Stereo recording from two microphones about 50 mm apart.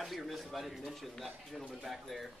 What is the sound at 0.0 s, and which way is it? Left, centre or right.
Speech, centre.